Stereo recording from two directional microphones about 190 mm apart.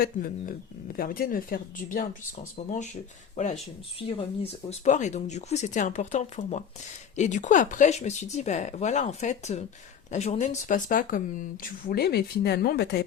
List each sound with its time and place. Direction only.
0.0 s speech: 50° left (ahead or behind); by 4.1 s 30° left (ahead or behind)
4.7 s speech: 40° left (ahead or behind)
11.9 s speech: 55° left (ahead or behind)